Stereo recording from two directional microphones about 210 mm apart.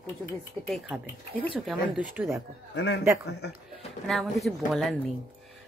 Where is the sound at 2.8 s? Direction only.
55° left (ahead or behind).